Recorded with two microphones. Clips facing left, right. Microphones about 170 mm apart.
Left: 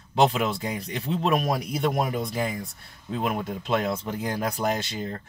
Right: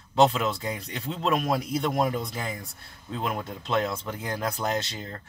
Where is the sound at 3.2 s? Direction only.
15° left (ahead or behind).